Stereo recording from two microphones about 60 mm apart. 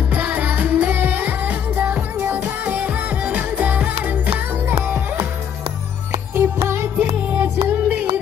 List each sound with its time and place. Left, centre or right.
0.1 s music: right
2.1 s music: right
2.4 s music: right
6.3 s music: right
7.4 s music: right